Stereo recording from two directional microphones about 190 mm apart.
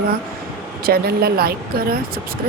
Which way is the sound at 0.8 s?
55° right (ahead or behind).